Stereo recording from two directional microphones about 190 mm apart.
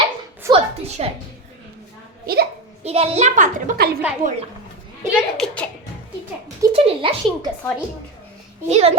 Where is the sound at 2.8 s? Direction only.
30° right (ahead or behind).